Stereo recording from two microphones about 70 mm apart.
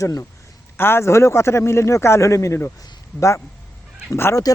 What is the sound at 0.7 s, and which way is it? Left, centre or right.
Speech, left.